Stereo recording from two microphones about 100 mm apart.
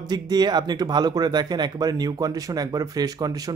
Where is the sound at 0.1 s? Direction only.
40° right (ahead or behind).